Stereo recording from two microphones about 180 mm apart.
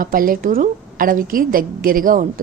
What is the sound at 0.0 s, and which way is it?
A woman's voice, 50° right (ahead or behind).